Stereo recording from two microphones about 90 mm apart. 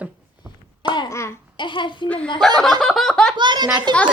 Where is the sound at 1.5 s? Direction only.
60° left (ahead or behind).